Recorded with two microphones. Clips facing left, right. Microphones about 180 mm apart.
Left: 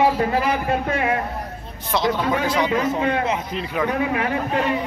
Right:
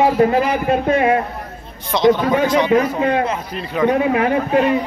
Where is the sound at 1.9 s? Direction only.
Centre (ahead or behind).